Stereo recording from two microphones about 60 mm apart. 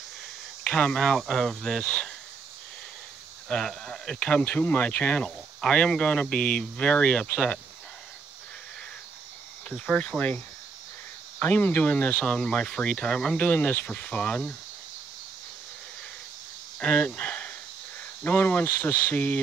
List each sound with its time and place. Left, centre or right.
0.7 s speech: centre
0.9 s speech: centre
3.4 s speech: centre
4.2 s speech: centre
9.7 s speech: centre
11.3 s speech: left
13.4 s speech: left
16.8 s speech: left